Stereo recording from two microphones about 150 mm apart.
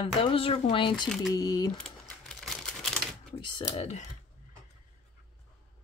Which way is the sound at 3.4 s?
35° left (ahead or behind).